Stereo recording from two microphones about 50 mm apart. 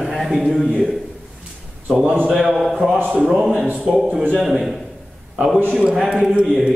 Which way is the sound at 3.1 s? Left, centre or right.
Centre.